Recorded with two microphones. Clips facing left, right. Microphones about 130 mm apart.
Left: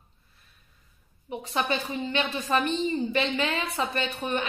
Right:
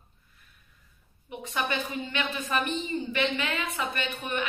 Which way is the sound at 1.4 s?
30° left (ahead or behind).